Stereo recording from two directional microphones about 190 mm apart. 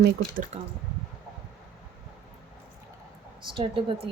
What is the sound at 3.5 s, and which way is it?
Speech, 25° right (ahead or behind).